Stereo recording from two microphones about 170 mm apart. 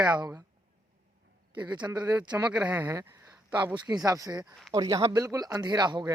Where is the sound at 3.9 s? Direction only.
20° right (ahead or behind).